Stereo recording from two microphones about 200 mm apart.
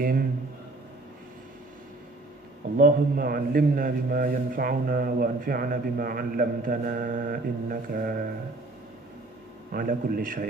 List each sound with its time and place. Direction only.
0.0 s a man's voice: 45° right (ahead or behind)
2.8 s a man's voice: 45° right (ahead or behind)
9.7 s a man's voice: 45° right (ahead or behind)